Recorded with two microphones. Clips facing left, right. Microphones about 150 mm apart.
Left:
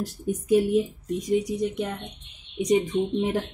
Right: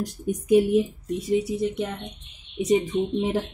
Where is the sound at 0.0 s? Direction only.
15° right (ahead or behind).